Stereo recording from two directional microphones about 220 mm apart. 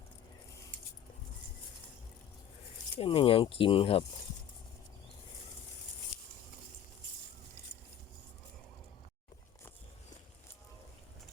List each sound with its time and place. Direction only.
3.0 s speech: 25° left (ahead or behind)